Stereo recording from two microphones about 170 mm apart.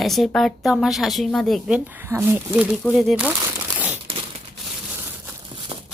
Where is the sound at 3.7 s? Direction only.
10° right (ahead or behind).